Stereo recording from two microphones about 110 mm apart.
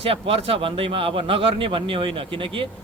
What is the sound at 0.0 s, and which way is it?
A man's voice, 60° right (ahead or behind).